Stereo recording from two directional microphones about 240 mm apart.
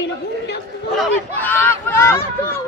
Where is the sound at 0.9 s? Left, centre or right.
Centre.